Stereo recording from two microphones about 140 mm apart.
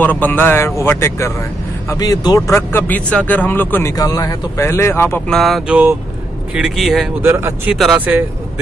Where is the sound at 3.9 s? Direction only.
25° left (ahead or behind).